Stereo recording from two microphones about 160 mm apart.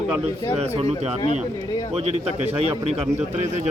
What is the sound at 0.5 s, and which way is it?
Speech, 40° right (ahead or behind).